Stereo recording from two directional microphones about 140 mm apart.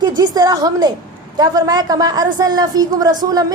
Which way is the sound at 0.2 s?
25° right (ahead or behind).